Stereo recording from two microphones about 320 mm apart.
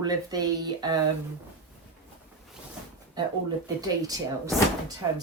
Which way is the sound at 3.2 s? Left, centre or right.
Centre.